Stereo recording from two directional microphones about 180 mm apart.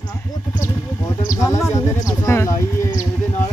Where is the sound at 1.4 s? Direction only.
15° left (ahead or behind).